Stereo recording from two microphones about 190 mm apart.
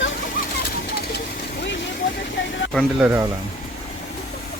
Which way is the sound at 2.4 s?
80° left.